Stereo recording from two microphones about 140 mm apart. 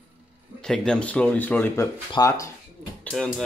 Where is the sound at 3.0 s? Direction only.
5° left (ahead or behind).